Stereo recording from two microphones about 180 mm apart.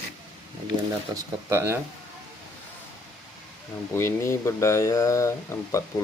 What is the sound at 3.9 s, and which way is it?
Speech, 15° left (ahead or behind).